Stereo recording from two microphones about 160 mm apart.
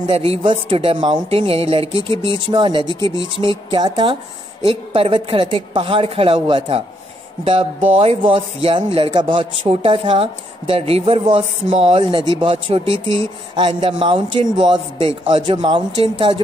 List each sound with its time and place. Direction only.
0.0 s speech: 35° right (ahead or behind)
7.9 s speech: 40° right (ahead or behind)